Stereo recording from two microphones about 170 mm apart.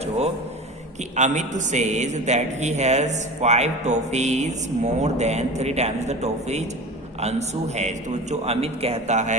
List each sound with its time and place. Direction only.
1.1 s a man's voice: 45° right (ahead or behind)